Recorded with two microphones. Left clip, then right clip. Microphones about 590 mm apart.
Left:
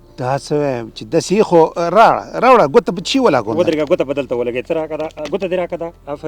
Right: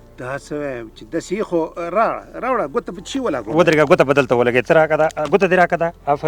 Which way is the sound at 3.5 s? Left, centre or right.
Right.